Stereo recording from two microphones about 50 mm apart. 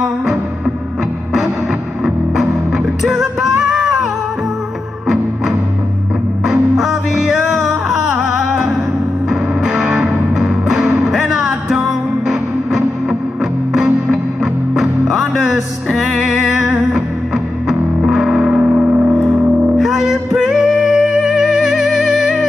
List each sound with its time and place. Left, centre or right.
2.0 s music: centre
6.4 s music: centre
12.3 s music: centre
16.2 s music: centre
17.6 s music: centre
18.4 s music: right
19.2 s music: centre